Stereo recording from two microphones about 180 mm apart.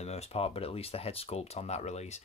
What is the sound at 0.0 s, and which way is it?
Speech, 35° left (ahead or behind).